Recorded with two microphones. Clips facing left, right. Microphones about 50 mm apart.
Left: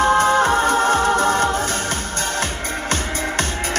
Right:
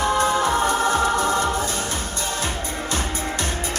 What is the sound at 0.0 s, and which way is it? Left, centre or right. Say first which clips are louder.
Music: left 5 dB; left.